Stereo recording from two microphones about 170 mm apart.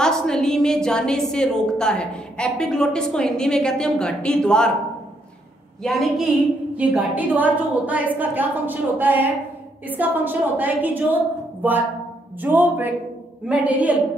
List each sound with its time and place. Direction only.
0.0 s a woman's voice: 5° left (ahead or behind)
5.8 s a woman's voice: centre (ahead or behind)